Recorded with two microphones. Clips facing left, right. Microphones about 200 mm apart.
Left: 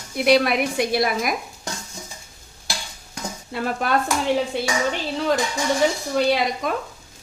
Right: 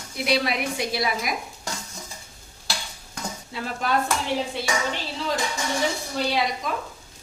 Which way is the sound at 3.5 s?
55° left (ahead or behind).